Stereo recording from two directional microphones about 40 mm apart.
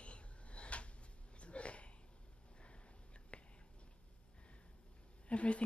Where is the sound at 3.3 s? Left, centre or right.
Left.